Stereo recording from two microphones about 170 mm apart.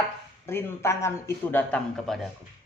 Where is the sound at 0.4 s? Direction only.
15° left (ahead or behind).